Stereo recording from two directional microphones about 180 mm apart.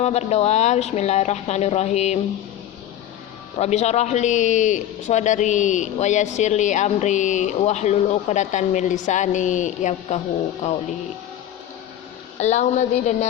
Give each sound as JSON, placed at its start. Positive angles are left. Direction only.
{"t": 0.0, "sound": "a man's voice", "side_deg": 35}
{"t": 3.6, "sound": "a man's voice", "side_deg": 35}
{"t": 12.4, "sound": "a man's voice", "side_deg": 40}